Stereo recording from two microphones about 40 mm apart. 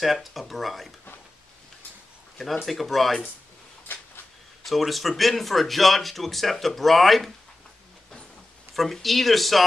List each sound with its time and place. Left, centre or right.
0.0 s speech: centre
2.3 s speech: centre
3.9 s a sound: left
4.6 s speech: centre
8.7 s speech: centre